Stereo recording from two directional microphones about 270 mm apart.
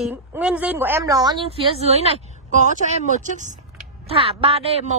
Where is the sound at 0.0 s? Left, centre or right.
Centre.